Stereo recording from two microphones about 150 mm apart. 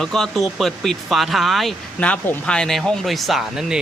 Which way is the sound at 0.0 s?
5° left (ahead or behind).